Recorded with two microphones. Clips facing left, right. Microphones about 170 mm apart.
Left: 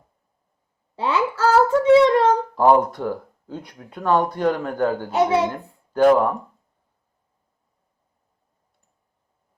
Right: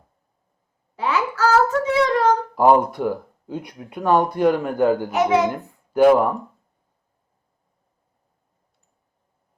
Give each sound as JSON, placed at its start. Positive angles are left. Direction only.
{"t": 0.9, "sound": "child singing", "side_deg": 30}
{"t": 2.6, "sound": "speech", "side_deg": -10}
{"t": 5.1, "sound": "a child's voice", "side_deg": 30}
{"t": 5.5, "sound": "a child's voice", "side_deg": -10}